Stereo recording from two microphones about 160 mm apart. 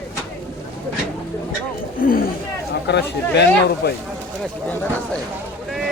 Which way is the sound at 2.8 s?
90° left.